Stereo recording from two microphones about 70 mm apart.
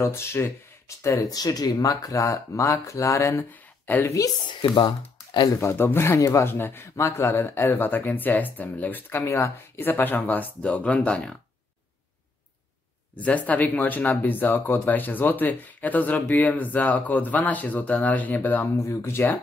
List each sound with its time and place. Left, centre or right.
0.0 s speech: left
3.8 s a woman's voice: left
4.8 s speech: left
5.5 s speech: left
6.1 s speech: left
6.4 s speech: left; by 11.3 s centre
13.2 s speech: left
18.9 s speech: left